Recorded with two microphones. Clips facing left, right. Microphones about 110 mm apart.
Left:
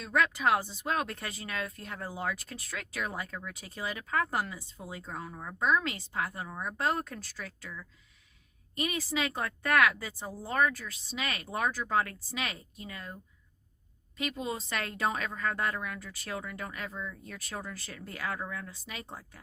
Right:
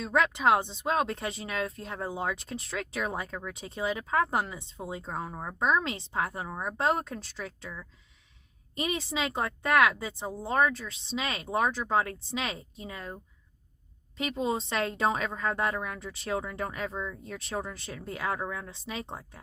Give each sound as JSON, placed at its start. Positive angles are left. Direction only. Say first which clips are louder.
{"t": 0.0, "sound": "speech", "louder": "right 3 dB", "side_deg": -25}